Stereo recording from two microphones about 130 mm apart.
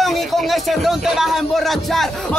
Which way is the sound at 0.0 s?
Centre (ahead or behind).